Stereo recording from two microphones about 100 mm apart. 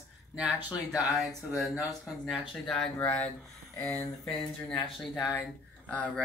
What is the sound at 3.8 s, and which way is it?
Speech, 30° left (ahead or behind).